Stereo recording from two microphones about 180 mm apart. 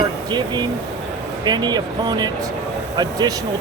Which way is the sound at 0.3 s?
25° right (ahead or behind).